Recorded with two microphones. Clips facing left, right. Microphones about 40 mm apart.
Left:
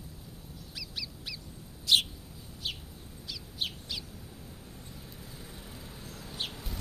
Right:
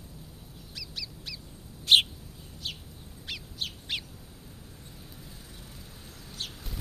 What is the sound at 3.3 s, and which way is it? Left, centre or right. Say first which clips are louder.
Bird: even; right.